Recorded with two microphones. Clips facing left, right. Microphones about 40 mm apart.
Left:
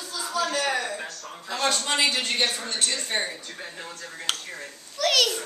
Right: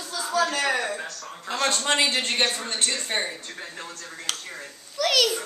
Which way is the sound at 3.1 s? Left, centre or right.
Centre.